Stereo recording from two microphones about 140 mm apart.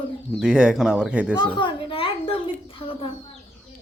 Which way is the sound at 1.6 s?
40° left (ahead or behind).